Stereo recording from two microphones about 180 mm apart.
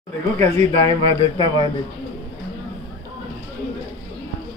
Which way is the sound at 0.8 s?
30° right (ahead or behind).